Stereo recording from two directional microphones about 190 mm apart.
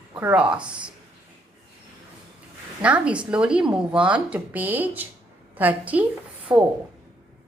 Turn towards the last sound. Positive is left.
turn(degrees=-15)  # may be behind; listen again after turning